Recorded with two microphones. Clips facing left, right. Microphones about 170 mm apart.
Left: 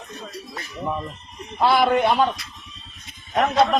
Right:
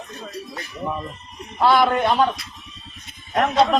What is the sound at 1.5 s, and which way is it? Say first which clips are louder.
Speech: right 1 dB; 15° left (ahead or behind).